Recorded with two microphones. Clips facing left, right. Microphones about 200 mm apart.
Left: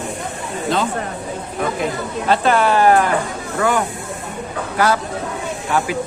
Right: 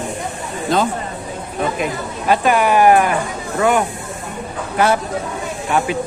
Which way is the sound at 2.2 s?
15° right (ahead or behind).